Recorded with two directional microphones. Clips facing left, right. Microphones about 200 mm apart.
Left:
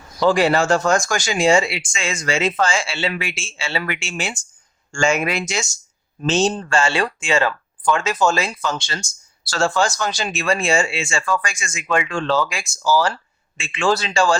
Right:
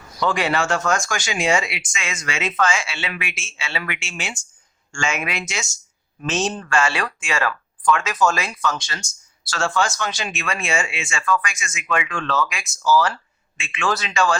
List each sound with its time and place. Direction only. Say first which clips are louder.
0.2 s speech: left 5 dB; 35° left (ahead or behind)